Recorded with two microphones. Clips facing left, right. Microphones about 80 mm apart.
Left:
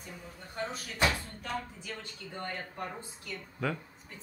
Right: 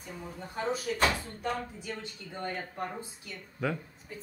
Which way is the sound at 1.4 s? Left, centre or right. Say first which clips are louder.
Right 4 dB; centre.